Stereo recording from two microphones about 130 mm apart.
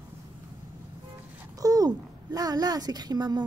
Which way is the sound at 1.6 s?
30° right (ahead or behind).